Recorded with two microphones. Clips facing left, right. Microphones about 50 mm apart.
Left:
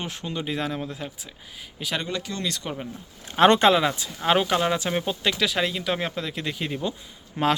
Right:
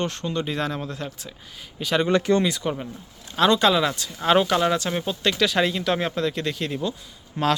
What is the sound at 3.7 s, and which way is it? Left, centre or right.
Speech, centre.